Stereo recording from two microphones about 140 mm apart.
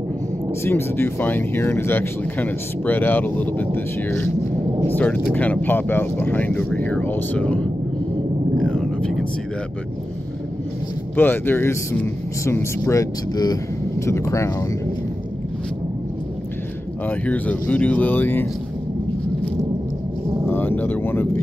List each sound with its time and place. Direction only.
0.7 s speech: 15° left (ahead or behind)
8.5 s whispering: 5° left (ahead or behind)
11.1 s speech: 15° left (ahead or behind)
17.1 s speech: 10° left (ahead or behind)
20.4 s a sound: 15° left (ahead or behind)